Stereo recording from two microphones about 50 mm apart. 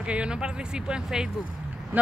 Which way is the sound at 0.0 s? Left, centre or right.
Right.